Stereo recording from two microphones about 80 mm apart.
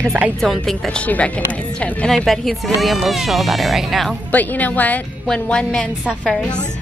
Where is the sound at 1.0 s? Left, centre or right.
Centre.